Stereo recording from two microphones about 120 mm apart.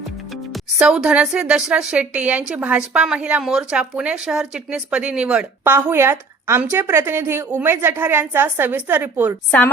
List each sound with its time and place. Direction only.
0.5 s speech: 5° right (ahead or behind)
5.7 s a woman's voice: 20° right (ahead or behind)
9.5 s a woman's voice: 15° left (ahead or behind)